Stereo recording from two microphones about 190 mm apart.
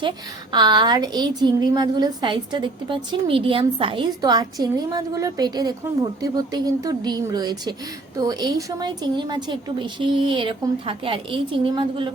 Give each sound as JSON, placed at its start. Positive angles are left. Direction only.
{"t": 0.5, "sound": "a woman's voice", "side_deg": -25}